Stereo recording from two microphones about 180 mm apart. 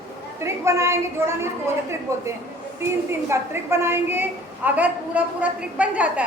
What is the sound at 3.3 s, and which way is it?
A woman's voice, 15° right (ahead or behind).